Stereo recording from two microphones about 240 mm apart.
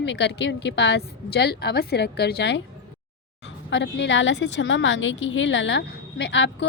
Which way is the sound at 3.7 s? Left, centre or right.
Left.